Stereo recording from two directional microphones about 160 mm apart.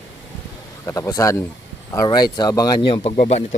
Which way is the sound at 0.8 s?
20° left (ahead or behind).